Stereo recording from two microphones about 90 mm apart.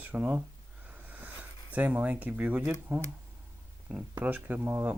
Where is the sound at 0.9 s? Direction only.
20° right (ahead or behind).